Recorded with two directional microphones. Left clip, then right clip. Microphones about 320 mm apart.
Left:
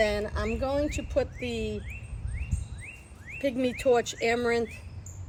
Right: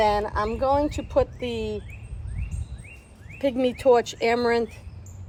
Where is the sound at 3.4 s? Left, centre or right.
Centre.